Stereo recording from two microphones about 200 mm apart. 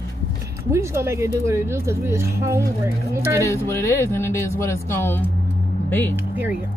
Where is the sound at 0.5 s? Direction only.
15° right (ahead or behind).